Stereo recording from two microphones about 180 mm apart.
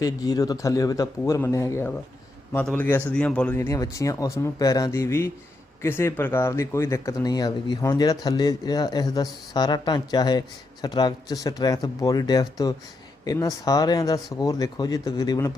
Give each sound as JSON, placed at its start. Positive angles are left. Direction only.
{"t": 0.0, "sound": "speech", "side_deg": 20}